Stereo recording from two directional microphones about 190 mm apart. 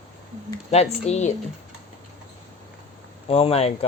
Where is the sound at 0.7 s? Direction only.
35° left (ahead or behind).